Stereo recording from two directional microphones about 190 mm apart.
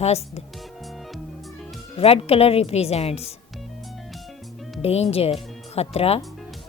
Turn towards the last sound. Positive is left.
turn(degrees=30)  # may be behind; listen again after turning